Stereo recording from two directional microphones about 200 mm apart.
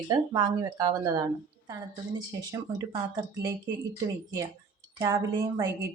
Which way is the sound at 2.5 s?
15° right (ahead or behind).